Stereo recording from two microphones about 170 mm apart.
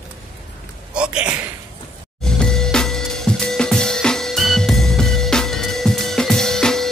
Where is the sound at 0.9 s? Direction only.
5° right (ahead or behind).